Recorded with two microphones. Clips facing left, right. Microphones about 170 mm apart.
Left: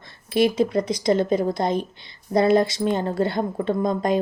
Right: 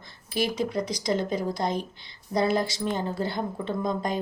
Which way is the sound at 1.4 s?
55° left (ahead or behind).